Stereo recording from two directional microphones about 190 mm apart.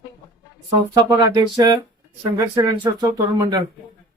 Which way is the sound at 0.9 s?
20° right (ahead or behind).